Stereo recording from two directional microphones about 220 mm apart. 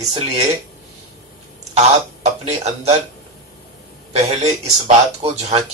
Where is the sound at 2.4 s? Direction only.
30° right (ahead or behind).